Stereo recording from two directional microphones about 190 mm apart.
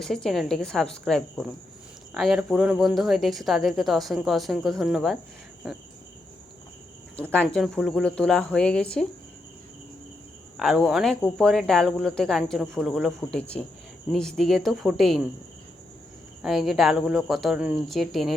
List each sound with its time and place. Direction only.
0.0 s speech: centre (ahead or behind)
5.6 s cricket: 5° right (ahead or behind)
7.2 s speech: 5° left (ahead or behind)
10.6 s speech: centre (ahead or behind)
16.4 s speech: centre (ahead or behind)